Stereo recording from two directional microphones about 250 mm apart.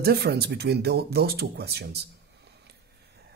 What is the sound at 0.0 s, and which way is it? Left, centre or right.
Speech, right.